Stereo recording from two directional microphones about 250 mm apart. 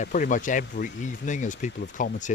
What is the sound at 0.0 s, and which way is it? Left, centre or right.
Speech, left.